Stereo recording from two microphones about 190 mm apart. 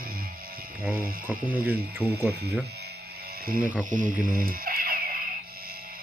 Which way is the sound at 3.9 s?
45° right (ahead or behind).